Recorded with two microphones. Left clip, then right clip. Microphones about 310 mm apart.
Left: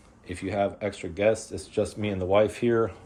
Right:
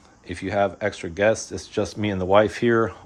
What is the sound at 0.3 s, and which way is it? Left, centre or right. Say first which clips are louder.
Speech: right 5 dB; centre.